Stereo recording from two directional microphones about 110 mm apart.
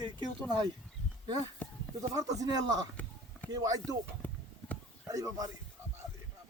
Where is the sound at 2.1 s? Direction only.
35° right (ahead or behind).